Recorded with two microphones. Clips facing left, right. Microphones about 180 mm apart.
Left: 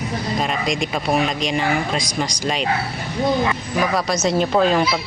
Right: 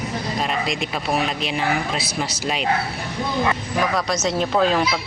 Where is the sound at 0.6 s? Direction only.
Centre (ahead or behind).